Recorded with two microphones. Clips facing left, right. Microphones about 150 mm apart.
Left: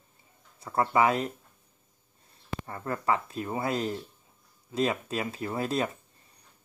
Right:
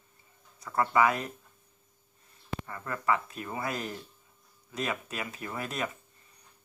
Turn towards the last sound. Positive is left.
turn(degrees=30)  # may be behind; listen again after turning